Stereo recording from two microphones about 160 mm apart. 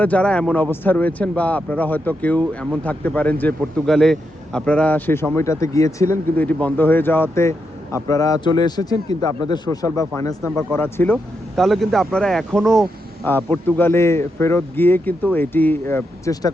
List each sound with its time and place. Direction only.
0.0 s speech: 10° left (ahead or behind)
11.5 s speech: centre (ahead or behind); by 16.5 s 20° left (ahead or behind)